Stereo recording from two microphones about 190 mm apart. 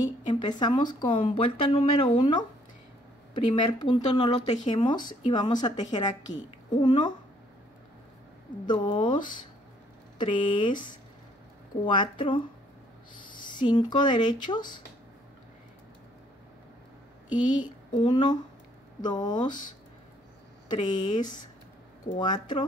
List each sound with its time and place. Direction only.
0.0 s a woman's voice: 25° left (ahead or behind)
3.5 s a woman's voice: 25° left (ahead or behind)
6.3 s a woman's voice: 40° left (ahead or behind)
6.8 s a woman's voice: 25° left (ahead or behind)
8.6 s a woman's voice: 25° left (ahead or behind)
11.8 s a woman's voice: 25° left (ahead or behind)
17.3 s a woman's voice: 25° left (ahead or behind)
20.7 s a woman's voice: 25° left (ahead or behind)